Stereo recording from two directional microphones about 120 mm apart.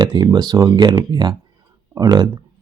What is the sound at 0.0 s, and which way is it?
Speech, 35° right (ahead or behind).